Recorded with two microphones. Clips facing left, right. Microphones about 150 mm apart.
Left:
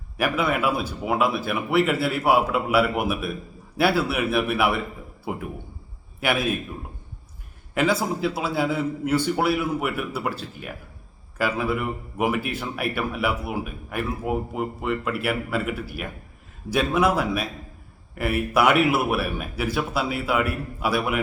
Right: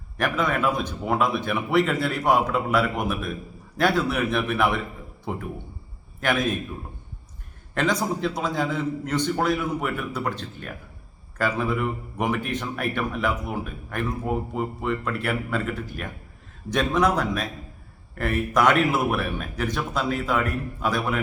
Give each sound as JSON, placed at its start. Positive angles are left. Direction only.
{"t": 0.2, "sound": "speech", "side_deg": 10}
{"t": 7.7, "sound": "speech", "side_deg": 5}